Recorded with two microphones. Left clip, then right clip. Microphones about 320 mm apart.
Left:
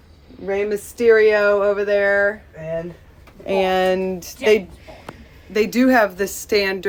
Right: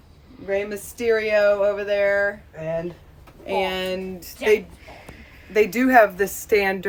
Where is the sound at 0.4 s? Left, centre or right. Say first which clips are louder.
Left 4 dB; left.